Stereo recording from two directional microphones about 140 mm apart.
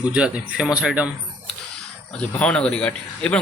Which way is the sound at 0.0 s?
10° right (ahead or behind).